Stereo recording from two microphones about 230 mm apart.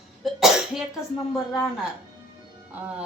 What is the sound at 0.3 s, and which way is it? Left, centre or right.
Cough, centre.